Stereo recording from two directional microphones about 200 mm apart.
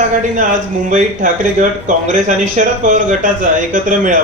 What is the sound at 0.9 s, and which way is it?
Speech, 40° right (ahead or behind).